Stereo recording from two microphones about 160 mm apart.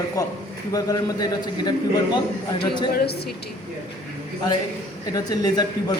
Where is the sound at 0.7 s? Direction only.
25° left (ahead or behind).